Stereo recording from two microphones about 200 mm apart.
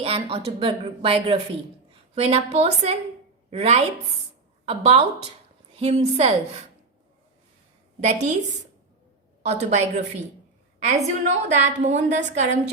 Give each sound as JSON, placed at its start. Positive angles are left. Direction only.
{"t": 0.0, "sound": "a woman's voice", "side_deg": -30}
{"t": 8.0, "sound": "a woman's voice", "side_deg": -35}